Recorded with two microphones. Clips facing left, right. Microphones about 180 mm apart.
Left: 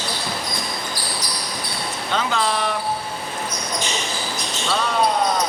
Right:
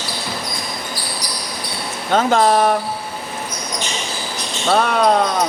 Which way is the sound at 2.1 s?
50° right (ahead or behind).